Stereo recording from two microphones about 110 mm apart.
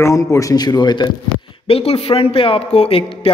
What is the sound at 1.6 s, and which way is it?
A man's voice, 65° left (ahead or behind).